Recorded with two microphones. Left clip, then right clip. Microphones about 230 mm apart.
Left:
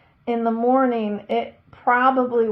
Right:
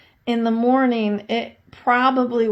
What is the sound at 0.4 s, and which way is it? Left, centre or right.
A woman's voice, right.